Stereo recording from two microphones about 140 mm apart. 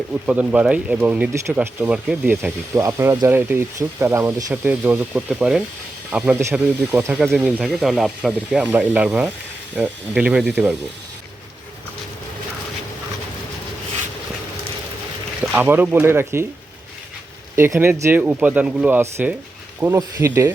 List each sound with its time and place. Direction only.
0.3 s speech: 5° right (ahead or behind)
15.5 s speech: 15° right (ahead or behind)
17.5 s speech: 20° right (ahead or behind)